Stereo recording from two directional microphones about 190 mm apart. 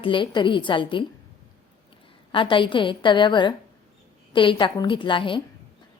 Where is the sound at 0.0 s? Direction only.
25° left (ahead or behind).